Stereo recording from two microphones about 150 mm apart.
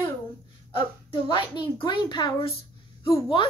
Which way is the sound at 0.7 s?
35° left (ahead or behind).